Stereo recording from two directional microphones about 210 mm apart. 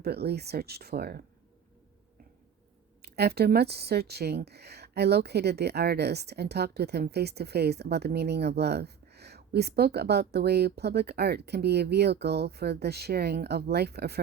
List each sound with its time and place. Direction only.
0.0 s speech: 50° right (ahead or behind)
3.0 s speech: 50° right (ahead or behind)